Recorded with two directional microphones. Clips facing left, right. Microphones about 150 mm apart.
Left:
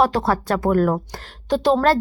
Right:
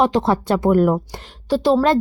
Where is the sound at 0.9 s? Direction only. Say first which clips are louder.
Right 2 dB; 5° right (ahead or behind).